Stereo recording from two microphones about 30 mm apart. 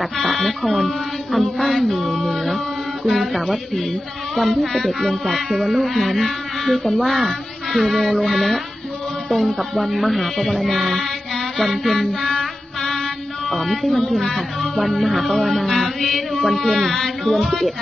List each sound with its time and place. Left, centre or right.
0.2 s music: centre
6.1 s a sound: centre
6.9 s speech: centre
7.2 s female singing: centre
8.3 s music: centre
12.3 s music: centre
13.5 s music: centre
16.3 s speech: centre
16.8 s music: centre